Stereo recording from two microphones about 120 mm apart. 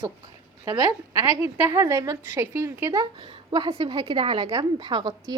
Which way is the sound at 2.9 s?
30° right (ahead or behind).